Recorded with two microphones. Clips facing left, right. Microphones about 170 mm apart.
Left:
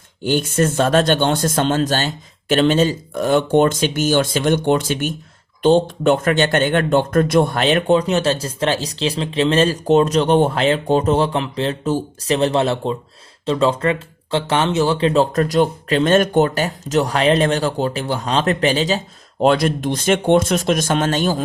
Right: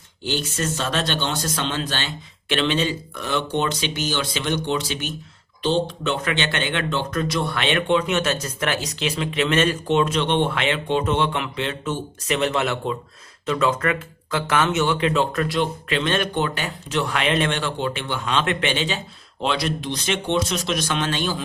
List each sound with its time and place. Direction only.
0.2 s speech: 50° left (ahead or behind)